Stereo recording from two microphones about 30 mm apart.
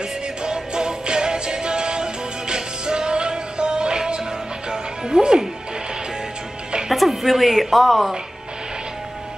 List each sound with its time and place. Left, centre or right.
0.4 s music: right
6.9 s a woman's voice: centre